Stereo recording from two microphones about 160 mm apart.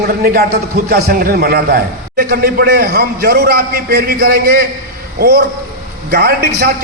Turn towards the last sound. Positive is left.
turn(degrees=-85)